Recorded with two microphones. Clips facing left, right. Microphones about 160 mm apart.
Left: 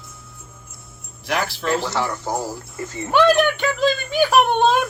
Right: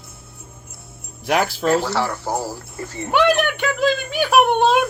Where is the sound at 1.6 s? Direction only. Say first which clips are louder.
Right 3 dB; 45° right (ahead or behind).